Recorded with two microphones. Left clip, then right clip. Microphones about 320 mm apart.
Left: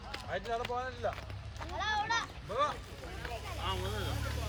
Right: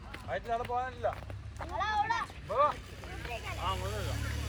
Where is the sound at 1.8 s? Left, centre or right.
Centre.